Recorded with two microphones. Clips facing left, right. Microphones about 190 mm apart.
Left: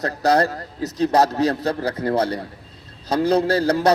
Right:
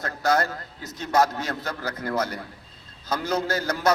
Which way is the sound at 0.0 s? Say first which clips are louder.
Left 5 dB; 35° left (ahead or behind).